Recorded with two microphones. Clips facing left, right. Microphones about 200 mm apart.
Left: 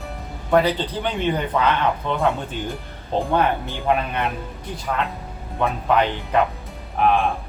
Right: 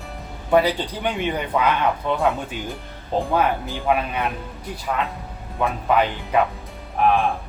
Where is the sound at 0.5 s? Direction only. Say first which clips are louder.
Even; 10° right (ahead or behind).